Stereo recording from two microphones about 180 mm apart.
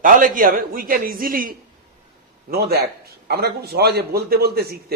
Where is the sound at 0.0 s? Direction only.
50° right (ahead or behind).